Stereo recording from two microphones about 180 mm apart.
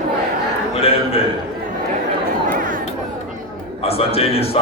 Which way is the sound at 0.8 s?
35° left (ahead or behind).